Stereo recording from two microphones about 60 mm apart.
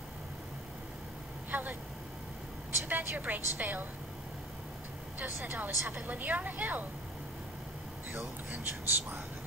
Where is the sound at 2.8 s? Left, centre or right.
Right.